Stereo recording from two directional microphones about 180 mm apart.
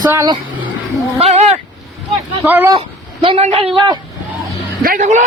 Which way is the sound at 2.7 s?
30° right (ahead or behind).